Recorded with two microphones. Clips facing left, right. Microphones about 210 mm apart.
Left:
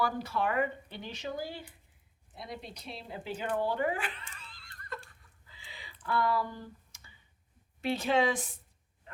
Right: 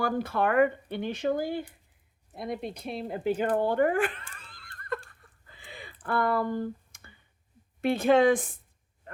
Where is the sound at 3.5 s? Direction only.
50° right (ahead or behind).